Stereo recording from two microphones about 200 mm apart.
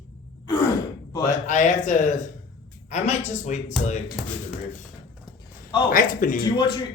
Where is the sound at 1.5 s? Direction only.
40° left (ahead or behind).